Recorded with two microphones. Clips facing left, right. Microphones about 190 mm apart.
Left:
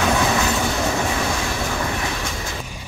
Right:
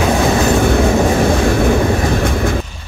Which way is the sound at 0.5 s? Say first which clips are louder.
Right 10 dB; 55° right (ahead or behind).